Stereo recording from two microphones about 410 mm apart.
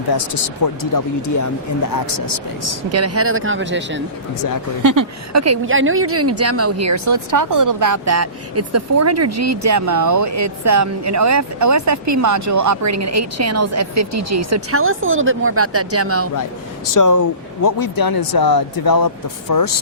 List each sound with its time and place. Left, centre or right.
0.1 s speech: left
2.9 s speech: right
4.8 s a woman's voice: right
16.9 s speech: left